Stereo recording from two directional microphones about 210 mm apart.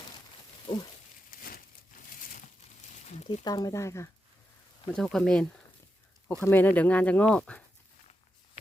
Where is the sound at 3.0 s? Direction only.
30° left (ahead or behind).